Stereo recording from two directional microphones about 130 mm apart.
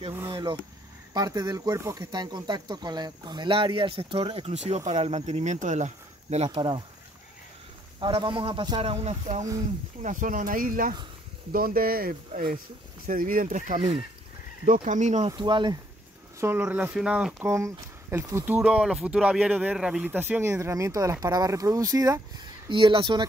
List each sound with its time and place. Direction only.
0.3 s speech: 35° right (ahead or behind); by 6.6 s 55° right (ahead or behind)
8.0 s speech: 40° right (ahead or behind)
10.0 s speech: 90° right; by 13.7 s 75° right (ahead or behind)
13.7 s speech: 45° right (ahead or behind)
14.7 s speech: 75° right (ahead or behind)
15.2 s speech: 35° right (ahead or behind)
16.3 s speech: 15° right (ahead or behind)
17.5 s speech: 25° right (ahead or behind)